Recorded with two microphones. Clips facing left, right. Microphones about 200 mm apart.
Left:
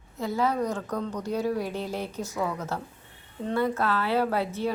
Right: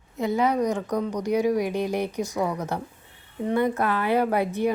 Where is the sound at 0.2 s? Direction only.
20° right (ahead or behind).